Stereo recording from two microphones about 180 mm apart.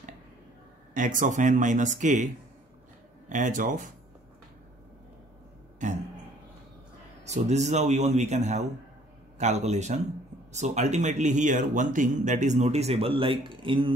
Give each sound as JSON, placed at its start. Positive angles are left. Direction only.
{"t": 0.9, "sound": "speech", "side_deg": -45}
{"t": 3.3, "sound": "speech", "side_deg": -45}
{"t": 5.8, "sound": "a sound", "side_deg": -45}
{"t": 7.2, "sound": "speech", "side_deg": -40}